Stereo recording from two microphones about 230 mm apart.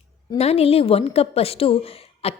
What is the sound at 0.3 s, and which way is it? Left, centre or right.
A woman's voice, left.